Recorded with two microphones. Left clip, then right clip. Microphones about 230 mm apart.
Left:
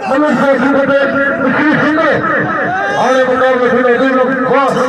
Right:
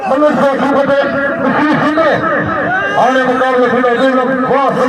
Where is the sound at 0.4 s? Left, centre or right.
Right.